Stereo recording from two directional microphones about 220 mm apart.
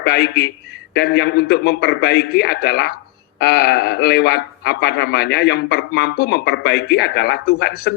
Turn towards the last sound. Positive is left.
turn(degrees=50)  # may be behind; listen again after turning